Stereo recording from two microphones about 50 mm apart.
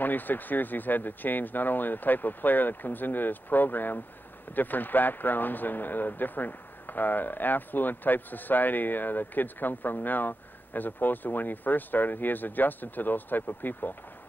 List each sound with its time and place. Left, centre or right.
0.0 s speech: left